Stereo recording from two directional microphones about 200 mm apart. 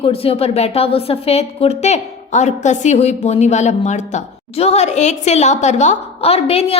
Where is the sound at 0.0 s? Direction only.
30° left (ahead or behind).